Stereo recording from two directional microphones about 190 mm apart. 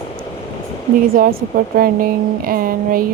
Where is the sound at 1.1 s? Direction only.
50° right (ahead or behind).